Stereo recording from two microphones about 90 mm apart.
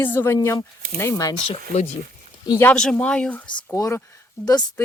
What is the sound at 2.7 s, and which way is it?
Speech, 10° left (ahead or behind).